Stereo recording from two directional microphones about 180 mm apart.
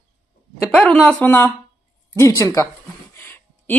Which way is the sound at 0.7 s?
5° left (ahead or behind).